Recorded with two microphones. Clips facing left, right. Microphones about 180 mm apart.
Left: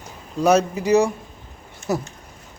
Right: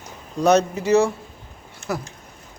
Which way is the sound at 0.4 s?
10° left (ahead or behind).